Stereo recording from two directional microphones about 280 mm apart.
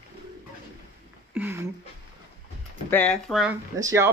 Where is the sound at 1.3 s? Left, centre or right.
Centre.